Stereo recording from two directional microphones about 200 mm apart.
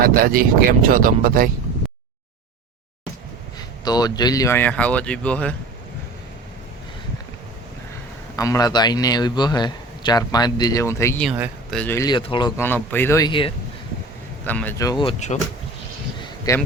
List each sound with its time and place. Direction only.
0.0 s speech: 45° right (ahead or behind)
3.8 s speech: 20° left (ahead or behind)
8.4 s a man's voice: 15° left (ahead or behind)
11.2 s speech: centre (ahead or behind); by 12.5 s 20° left (ahead or behind)
12.5 s speech: 10° left (ahead or behind)
14.4 s a man's voice: 10° left (ahead or behind); by 15.5 s 30° left (ahead or behind)
16.5 s speech: 15° left (ahead or behind)